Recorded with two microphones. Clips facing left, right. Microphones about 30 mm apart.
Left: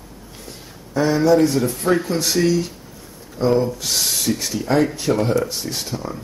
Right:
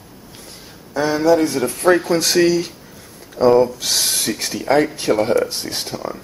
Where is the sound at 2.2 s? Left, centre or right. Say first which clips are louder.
Right 3 dB; right.